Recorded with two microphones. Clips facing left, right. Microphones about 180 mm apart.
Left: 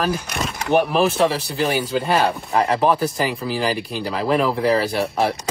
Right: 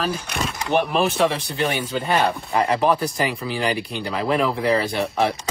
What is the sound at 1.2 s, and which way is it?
Speech, 30° left (ahead or behind).